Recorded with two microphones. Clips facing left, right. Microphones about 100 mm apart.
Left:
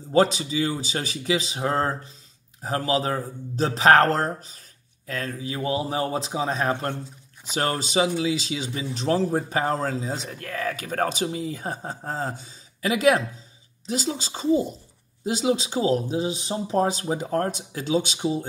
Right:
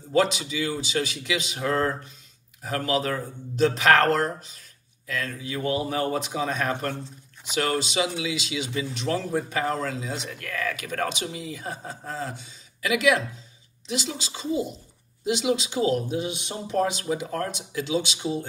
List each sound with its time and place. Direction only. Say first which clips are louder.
0.1 s speech: left 3 dB; 35° left (ahead or behind)